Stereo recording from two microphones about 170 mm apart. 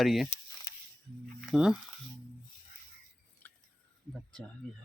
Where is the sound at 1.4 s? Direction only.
Centre (ahead or behind).